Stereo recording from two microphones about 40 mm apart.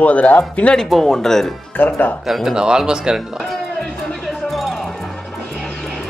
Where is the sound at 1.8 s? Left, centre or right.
Left.